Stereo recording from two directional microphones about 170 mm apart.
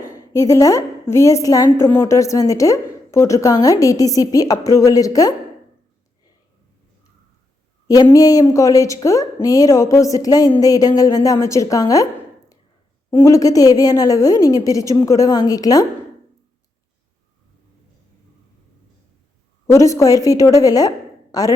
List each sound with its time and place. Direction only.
0.2 s a woman's voice: 20° left (ahead or behind)
8.0 s a woman's voice: 20° left (ahead or behind)
13.1 s a woman's voice: 20° left (ahead or behind)
19.6 s a woman's voice: 20° left (ahead or behind)